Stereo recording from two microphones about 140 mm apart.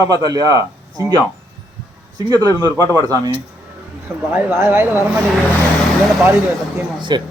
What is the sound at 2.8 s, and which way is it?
Speech, 20° left (ahead or behind).